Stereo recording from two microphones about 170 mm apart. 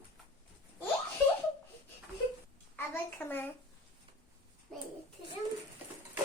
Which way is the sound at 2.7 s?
10° left (ahead or behind).